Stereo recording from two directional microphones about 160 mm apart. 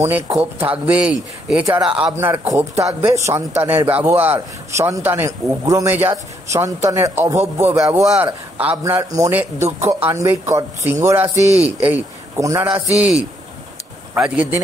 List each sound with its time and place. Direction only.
0.0 s a man's voice: 15° right (ahead or behind)
12.6 s a man's voice: 10° right (ahead or behind)